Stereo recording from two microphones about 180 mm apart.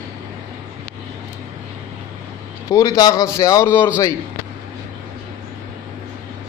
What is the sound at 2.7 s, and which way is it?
Speech, 20° left (ahead or behind).